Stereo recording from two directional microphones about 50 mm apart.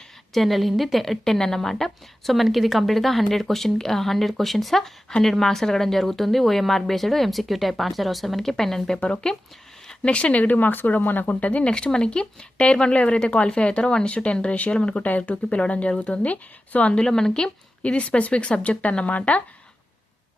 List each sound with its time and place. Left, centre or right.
0.3 s a woman's voice: centre; by 11.6 s left
11.6 s speech: centre
16.9 s speech: centre